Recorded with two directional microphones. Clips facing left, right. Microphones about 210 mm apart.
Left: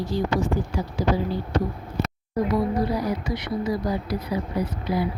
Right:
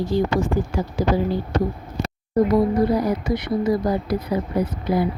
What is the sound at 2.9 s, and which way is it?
Speech, 50° right (ahead or behind).